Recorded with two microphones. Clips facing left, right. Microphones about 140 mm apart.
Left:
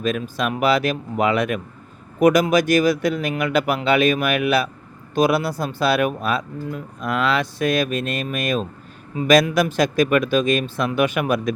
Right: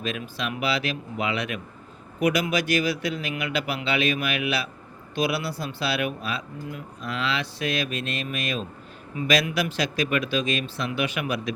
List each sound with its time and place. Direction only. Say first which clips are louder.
0.0 s speech: left 8 dB; 45° left (ahead or behind)